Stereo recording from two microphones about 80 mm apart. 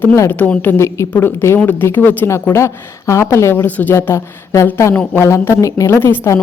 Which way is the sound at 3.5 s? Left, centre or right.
Left.